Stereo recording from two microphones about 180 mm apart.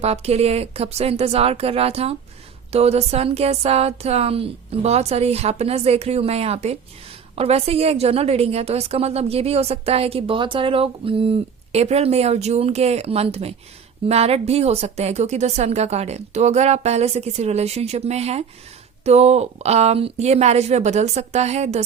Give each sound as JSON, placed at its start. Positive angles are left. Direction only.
{"t": 0.0, "sound": "a woman's voice", "side_deg": -35}